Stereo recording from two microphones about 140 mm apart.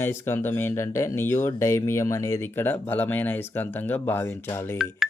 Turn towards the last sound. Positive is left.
turn(degrees=15)  # may be behind; listen again after turning